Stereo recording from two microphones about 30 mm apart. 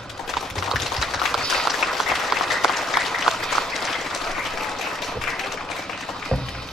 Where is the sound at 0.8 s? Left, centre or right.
Centre.